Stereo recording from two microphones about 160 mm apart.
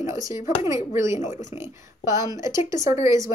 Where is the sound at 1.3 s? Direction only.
50° left (ahead or behind).